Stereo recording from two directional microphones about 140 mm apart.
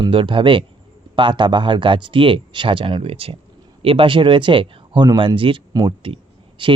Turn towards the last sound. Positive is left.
turn(degrees=-35)  # may be behind; listen again after turning